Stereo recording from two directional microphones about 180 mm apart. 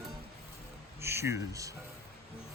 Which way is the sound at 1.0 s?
15° right (ahead or behind).